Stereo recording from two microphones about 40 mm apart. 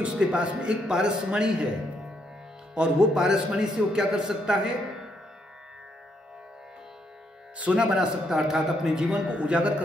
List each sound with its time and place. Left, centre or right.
0.0 s speech: right
2.7 s speech: right
7.5 s music: right
7.8 s speech: right
8.4 s speech: centre
9.3 s speech: right